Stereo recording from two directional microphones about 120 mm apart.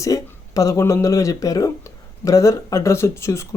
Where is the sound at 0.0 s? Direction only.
30° left (ahead or behind).